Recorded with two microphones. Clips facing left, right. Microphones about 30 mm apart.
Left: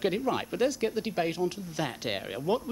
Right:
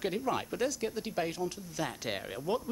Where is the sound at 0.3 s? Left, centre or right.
Left.